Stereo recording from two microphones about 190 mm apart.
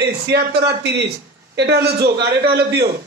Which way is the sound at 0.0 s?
60° right (ahead or behind).